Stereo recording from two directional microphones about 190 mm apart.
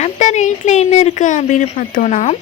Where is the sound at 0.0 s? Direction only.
40° left (ahead or behind).